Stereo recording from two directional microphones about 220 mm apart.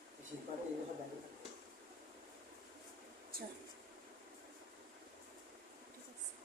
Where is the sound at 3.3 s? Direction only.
45° right (ahead or behind).